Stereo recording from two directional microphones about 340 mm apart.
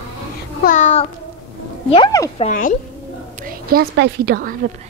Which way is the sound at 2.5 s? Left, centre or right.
Left.